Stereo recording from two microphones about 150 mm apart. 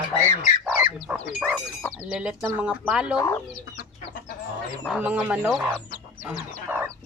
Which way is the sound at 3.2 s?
20° left (ahead or behind).